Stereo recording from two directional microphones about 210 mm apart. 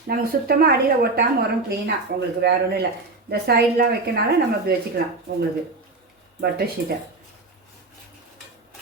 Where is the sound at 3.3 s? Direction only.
50° right (ahead or behind).